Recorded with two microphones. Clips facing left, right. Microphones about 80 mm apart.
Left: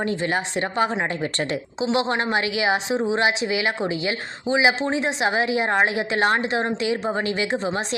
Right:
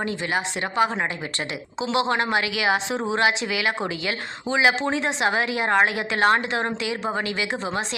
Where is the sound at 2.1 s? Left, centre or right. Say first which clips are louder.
Even; left.